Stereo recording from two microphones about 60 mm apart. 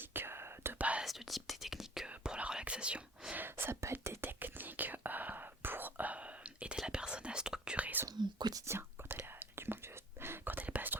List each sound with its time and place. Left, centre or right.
0.1 s whispering: right
0.8 s whispering: right
1.0 s whispering: centre
2.0 s whispering: centre
3.3 s whispering: right; by 7.9 s centre
8.0 s whispering: right
9.0 s whispering: right